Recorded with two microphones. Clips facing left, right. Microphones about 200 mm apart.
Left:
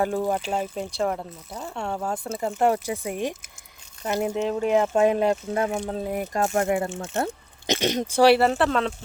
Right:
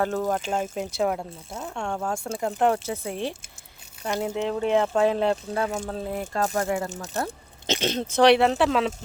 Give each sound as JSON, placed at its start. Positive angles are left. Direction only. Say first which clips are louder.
{"t": 0.0, "sound": "speech", "louder": "left 1 dB", "side_deg": 10}
{"t": 0.6, "sound": "speech", "louder": "right 1 dB", "side_deg": -5}
{"t": 4.4, "sound": "speech", "louder": "even", "side_deg": 10}
{"t": 6.9, "sound": "speech", "louder": "left 3 dB", "side_deg": -40}
{"t": 7.7, "sound": "speech", "louder": "left 2 dB", "side_deg": 15}